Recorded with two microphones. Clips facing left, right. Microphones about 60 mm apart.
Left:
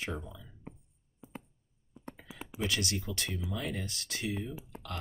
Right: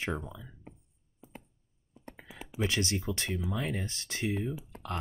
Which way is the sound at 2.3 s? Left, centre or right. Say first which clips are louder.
Right 2 dB; right.